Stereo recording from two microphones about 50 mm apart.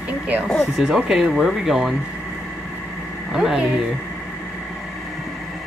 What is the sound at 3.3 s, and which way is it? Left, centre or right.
Speech, centre.